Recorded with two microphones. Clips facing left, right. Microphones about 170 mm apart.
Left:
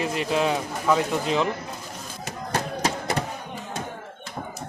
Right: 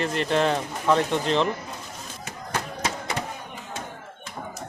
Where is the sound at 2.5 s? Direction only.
35° left (ahead or behind).